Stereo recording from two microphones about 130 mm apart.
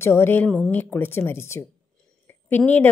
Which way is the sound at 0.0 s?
20° left (ahead or behind).